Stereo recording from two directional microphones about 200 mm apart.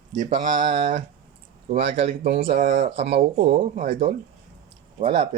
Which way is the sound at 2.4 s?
30° right (ahead or behind).